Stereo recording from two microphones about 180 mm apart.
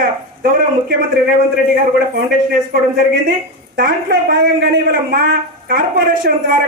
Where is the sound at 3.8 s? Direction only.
50° right (ahead or behind).